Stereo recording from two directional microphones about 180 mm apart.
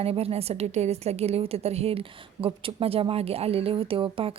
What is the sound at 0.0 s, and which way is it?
A woman's voice, 35° right (ahead or behind).